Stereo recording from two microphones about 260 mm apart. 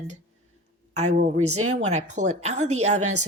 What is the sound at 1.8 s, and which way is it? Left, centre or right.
Speech, right.